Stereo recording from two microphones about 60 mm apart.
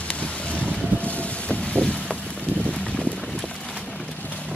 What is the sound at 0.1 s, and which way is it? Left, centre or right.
Boat, left.